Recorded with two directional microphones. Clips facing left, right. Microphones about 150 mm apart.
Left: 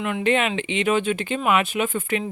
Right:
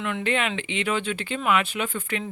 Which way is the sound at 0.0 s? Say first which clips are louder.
Left 4 dB; 15° left (ahead or behind).